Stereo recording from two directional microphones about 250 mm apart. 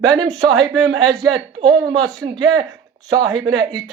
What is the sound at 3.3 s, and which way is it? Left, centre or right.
Speech, centre.